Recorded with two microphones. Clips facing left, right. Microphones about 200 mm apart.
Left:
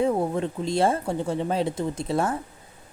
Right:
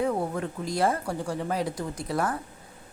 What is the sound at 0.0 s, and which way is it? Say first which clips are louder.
Speech: left 4 dB; 20° left (ahead or behind).